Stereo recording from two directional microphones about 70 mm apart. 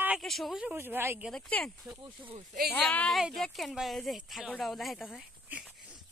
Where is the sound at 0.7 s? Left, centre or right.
Right.